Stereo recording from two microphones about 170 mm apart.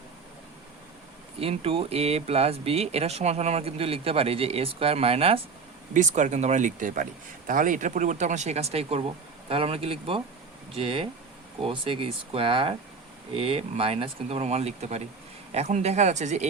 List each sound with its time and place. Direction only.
1.4 s speech: 35° right (ahead or behind)
5.9 s speech: 45° right (ahead or behind)